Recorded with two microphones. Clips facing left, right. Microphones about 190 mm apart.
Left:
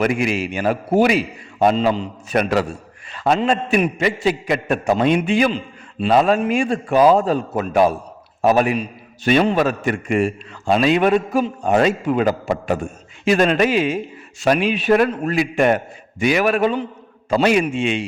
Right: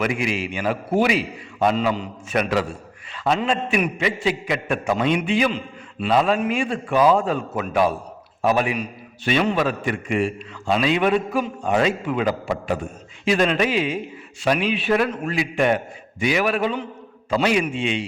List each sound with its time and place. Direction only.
0.0 s a man's voice: 45° left (ahead or behind)